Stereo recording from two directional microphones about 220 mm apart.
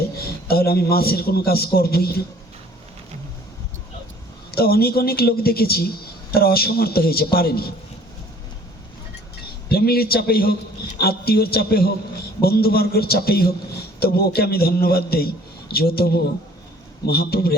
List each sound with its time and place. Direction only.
0.0 s a man's voice: 45° left (ahead or behind)
4.5 s a man's voice: 45° left (ahead or behind)
9.6 s a man's voice: 45° left (ahead or behind)